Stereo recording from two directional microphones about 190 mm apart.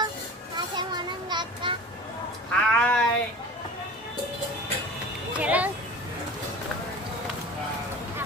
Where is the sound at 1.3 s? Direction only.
25° right (ahead or behind).